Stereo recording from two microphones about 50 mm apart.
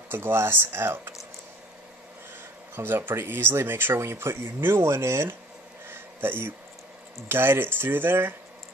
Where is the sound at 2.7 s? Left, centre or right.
Right.